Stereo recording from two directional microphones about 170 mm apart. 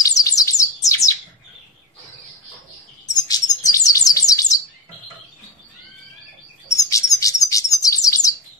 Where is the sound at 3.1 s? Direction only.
20° left (ahead or behind).